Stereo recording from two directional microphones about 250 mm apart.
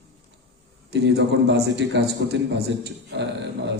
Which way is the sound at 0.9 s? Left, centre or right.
Right.